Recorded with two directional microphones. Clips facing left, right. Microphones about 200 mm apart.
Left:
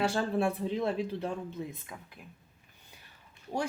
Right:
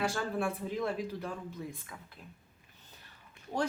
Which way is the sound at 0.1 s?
25° left (ahead or behind).